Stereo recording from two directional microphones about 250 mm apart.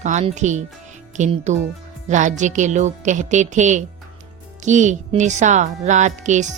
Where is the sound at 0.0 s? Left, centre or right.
Right.